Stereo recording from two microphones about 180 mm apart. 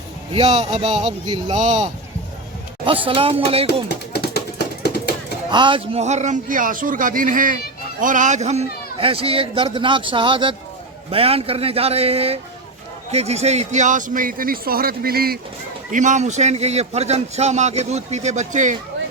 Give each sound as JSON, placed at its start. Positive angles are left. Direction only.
{"t": 0.3, "sound": "a man's voice", "side_deg": -35}
{"t": 2.8, "sound": "a man's voice", "side_deg": -30}
{"t": 3.8, "sound": "a sound", "side_deg": 60}
{"t": 5.5, "sound": "a man's voice", "side_deg": -25}
{"t": 15.9, "sound": "a man's voice", "side_deg": -45}